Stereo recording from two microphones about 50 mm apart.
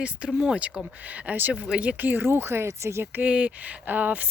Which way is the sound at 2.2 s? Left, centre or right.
Right.